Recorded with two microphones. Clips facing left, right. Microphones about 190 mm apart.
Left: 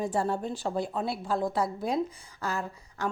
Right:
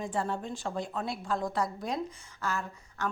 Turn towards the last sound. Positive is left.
turn(degrees=35)  # may be behind; listen again after turning